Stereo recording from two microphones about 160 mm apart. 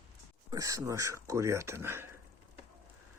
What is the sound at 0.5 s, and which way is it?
Speech, 20° right (ahead or behind).